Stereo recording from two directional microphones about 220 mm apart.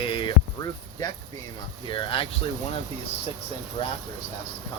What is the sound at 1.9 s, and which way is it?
Speech, 25° left (ahead or behind).